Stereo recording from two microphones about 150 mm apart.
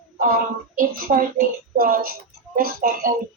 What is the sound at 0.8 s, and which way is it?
A woman's voice, 70° right (ahead or behind).